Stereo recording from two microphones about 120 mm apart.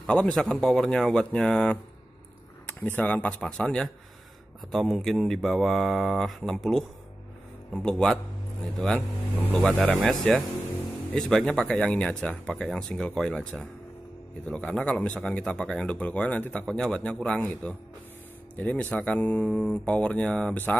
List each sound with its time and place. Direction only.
0.0 s speech: 5° left (ahead or behind)